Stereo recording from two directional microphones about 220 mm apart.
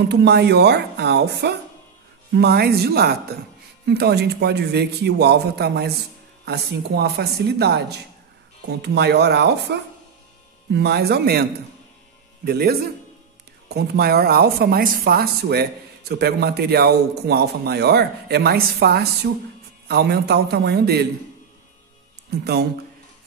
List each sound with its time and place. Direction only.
0.1 s speech: 50° right (ahead or behind)
12.4 s speech: 45° right (ahead or behind)
22.4 s speech: 45° right (ahead or behind)